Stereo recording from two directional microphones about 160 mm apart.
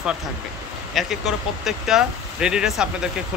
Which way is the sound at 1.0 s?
Centre (ahead or behind).